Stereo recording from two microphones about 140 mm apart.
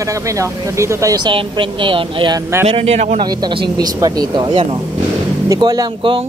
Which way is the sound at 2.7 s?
50° right (ahead or behind).